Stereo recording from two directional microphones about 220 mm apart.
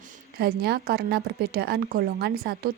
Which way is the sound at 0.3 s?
45° right (ahead or behind).